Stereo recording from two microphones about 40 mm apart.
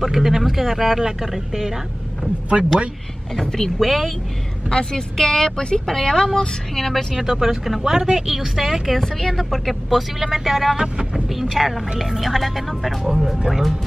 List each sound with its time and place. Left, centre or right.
0.0 s a woman's voice: centre
3.3 s a woman's voice: centre
3.8 s speech: centre
4.6 s a woman's voice: centre
7.2 s a woman's voice: centre
9.0 s speech: centre
10.8 s a woman's voice: centre
11.4 s speech: centre